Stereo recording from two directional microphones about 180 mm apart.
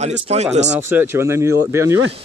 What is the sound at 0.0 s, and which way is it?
Speech, 40° right (ahead or behind).